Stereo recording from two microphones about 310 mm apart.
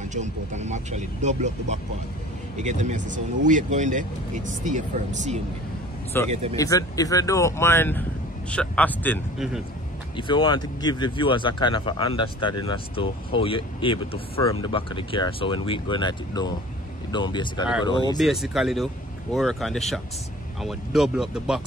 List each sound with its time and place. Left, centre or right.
0.1 s speech: right
6.1 s a man's voice: centre
10.1 s speech: centre
18.1 s a man's voice: centre